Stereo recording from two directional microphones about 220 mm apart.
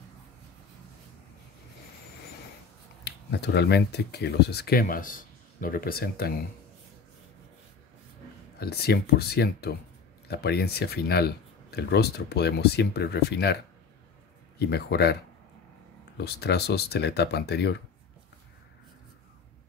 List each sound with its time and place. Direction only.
3.0 s speech: 50° left (ahead or behind)
8.5 s speech: 45° left (ahead or behind)
14.6 s speech: 50° left (ahead or behind)
16.2 s speech: 50° left (ahead or behind)